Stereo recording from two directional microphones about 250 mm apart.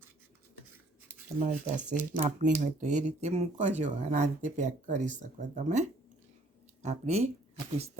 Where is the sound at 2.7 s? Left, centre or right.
Right.